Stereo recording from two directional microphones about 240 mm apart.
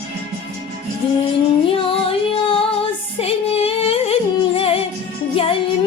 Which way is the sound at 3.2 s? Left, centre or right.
Left.